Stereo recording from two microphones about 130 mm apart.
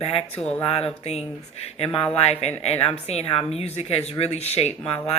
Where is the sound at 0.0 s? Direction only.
50° left (ahead or behind).